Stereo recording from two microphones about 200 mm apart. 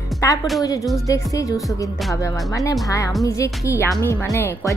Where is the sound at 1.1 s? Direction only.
15° left (ahead or behind).